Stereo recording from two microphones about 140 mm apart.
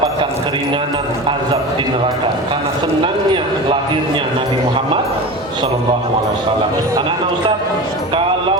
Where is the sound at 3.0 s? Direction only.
40° right (ahead or behind).